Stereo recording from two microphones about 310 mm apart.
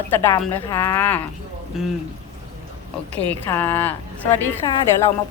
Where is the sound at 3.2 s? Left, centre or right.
Centre.